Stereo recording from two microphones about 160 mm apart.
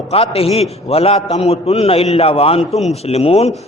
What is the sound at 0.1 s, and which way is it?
A man's voice, 40° left (ahead or behind).